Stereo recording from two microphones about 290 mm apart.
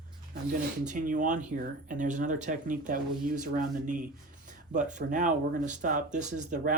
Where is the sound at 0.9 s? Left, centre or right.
Right.